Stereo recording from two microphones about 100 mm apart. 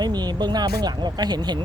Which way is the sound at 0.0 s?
45° right (ahead or behind).